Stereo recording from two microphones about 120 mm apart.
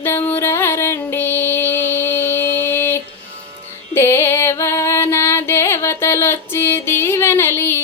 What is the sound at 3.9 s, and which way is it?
Female singing, 20° left (ahead or behind).